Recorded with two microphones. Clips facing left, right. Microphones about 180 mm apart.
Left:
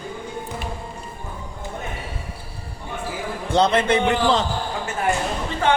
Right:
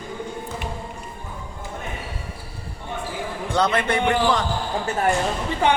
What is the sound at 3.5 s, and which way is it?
Speech, 25° left (ahead or behind).